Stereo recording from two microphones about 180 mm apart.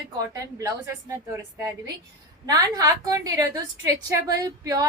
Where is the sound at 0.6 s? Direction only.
20° right (ahead or behind).